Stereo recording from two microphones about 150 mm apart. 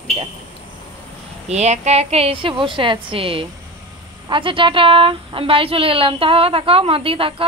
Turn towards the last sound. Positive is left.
turn(degrees=-35)  # may be behind; listen again after turning